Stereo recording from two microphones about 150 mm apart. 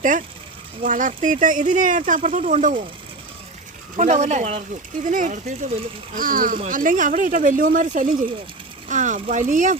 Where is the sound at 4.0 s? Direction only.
50° right (ahead or behind).